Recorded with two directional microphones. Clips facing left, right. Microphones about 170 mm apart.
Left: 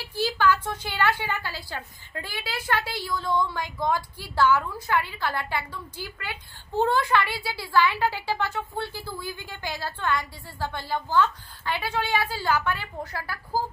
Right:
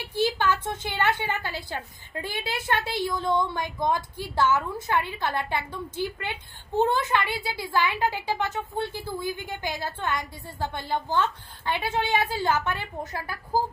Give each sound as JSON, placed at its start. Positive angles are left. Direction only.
{"t": 0.0, "sound": "a woman's voice", "side_deg": -20}